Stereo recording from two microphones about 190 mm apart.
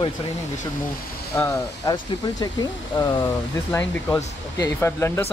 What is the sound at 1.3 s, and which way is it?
Speech, 15° left (ahead or behind).